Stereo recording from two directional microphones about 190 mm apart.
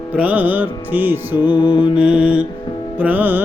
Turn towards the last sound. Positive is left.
turn(degrees=-10)  # may be behind; listen again after turning